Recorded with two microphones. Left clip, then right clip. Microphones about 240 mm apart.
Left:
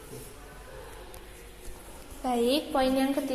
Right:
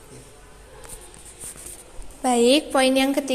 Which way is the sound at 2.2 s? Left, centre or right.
Right.